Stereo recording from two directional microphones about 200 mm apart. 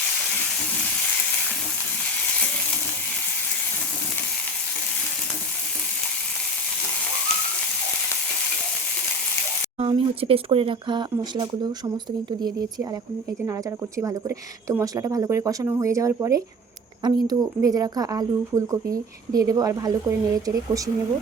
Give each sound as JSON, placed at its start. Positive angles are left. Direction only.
{"t": 9.7, "sound": "speech", "side_deg": -30}